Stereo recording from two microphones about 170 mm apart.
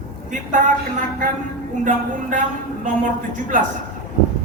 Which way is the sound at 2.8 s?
50° right (ahead or behind).